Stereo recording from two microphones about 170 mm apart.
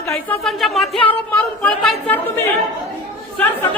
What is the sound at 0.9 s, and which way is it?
Speech, 30° left (ahead or behind).